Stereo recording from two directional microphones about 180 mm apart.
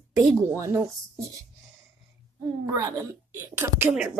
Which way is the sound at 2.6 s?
20° right (ahead or behind).